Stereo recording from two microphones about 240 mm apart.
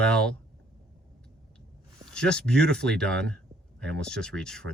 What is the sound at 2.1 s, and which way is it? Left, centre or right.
Speech, centre.